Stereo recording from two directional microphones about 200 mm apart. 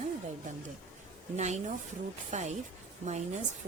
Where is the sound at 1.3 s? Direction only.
35° right (ahead or behind).